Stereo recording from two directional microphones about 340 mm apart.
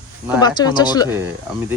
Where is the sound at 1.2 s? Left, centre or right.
Centre.